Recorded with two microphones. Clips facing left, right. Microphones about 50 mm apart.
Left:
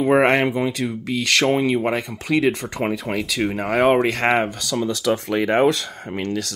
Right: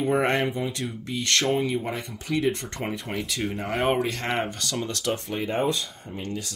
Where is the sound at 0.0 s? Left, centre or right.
Left.